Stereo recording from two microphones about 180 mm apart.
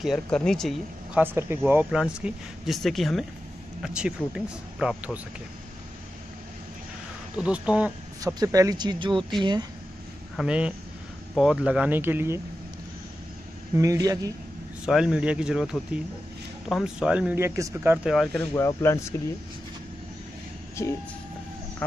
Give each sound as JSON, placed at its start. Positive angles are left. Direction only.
{"t": 0.0, "sound": "speech", "side_deg": 0}
{"t": 1.2, "sound": "speech", "side_deg": -15}
{"t": 7.3, "sound": "speech", "side_deg": -5}
{"t": 8.2, "sound": "speech", "side_deg": -20}
{"t": 10.3, "sound": "speech", "side_deg": -5}
{"t": 13.7, "sound": "speech", "side_deg": -20}
{"t": 14.9, "sound": "speech", "side_deg": -5}
{"t": 18.5, "sound": "speech", "side_deg": 15}
{"t": 20.8, "sound": "speech", "side_deg": 15}